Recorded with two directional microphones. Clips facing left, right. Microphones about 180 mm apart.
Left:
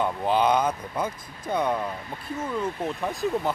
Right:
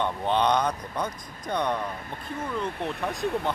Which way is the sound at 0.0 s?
5° left (ahead or behind).